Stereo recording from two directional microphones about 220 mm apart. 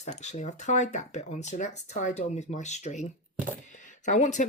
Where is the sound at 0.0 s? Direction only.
30° left (ahead or behind).